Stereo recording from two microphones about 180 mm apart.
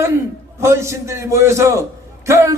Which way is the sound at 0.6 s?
15° right (ahead or behind).